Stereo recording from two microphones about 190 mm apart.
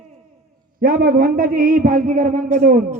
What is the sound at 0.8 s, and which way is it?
A man's voice, 50° right (ahead or behind).